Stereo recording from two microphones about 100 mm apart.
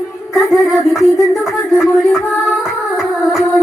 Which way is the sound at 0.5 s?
Centre (ahead or behind).